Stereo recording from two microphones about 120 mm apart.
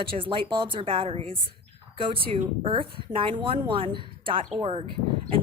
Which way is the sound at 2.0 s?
45° right (ahead or behind).